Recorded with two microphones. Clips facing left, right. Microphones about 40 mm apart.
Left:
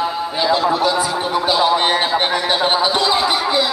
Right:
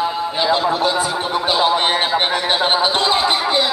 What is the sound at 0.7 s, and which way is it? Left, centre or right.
Speech, right.